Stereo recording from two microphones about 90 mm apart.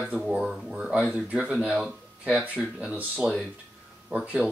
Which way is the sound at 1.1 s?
15° right (ahead or behind).